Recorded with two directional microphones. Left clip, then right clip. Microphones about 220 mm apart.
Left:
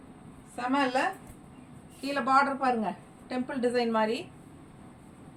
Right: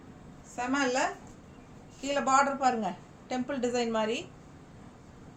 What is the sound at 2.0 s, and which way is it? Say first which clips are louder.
A woman's voice: left 1 dB; 20° right (ahead or behind).